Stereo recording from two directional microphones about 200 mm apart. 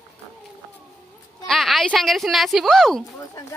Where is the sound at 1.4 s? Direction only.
Centre (ahead or behind).